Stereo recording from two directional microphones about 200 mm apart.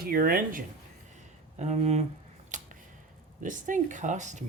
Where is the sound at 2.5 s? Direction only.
40° right (ahead or behind).